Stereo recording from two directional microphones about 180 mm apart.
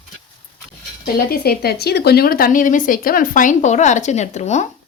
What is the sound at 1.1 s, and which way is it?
A woman's voice, 55° left (ahead or behind).